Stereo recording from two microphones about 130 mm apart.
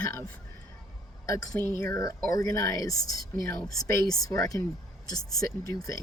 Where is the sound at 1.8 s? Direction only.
25° left (ahead or behind).